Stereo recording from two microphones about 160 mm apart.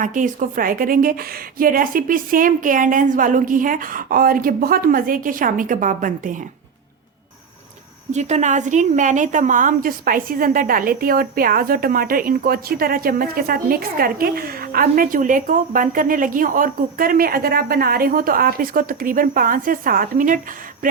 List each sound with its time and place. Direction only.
0.0 s a woman's voice: 55° right (ahead or behind)
8.1 s a woman's voice: 45° right (ahead or behind)